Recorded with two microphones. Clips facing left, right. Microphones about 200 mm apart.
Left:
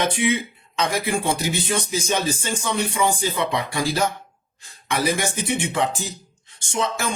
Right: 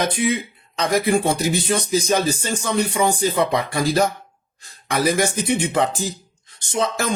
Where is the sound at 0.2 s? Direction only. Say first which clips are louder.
Right 1 dB; 40° right (ahead or behind).